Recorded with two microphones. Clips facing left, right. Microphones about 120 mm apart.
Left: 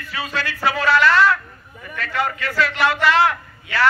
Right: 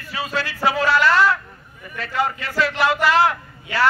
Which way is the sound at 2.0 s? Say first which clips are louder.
Even; 25° right (ahead or behind).